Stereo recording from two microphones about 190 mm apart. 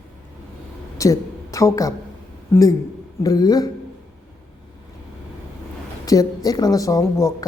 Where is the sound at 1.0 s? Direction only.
15° left (ahead or behind).